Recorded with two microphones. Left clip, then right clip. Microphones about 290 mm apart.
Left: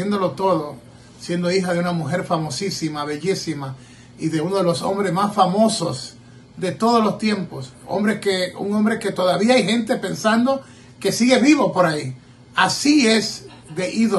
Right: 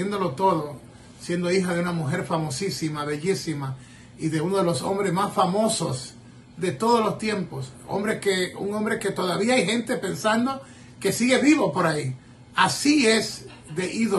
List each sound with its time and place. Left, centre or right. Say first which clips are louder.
0.0 s a man's voice: left 3 dB; centre